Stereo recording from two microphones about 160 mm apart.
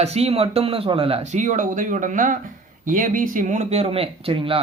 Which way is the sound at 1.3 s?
50° right (ahead or behind).